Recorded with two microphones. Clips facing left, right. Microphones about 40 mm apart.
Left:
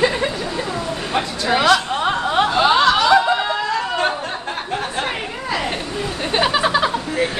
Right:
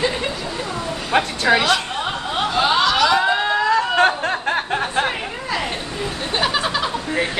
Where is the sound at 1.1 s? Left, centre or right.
Right.